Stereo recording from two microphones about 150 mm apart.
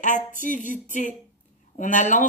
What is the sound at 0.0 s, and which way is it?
Speech, 55° left (ahead or behind).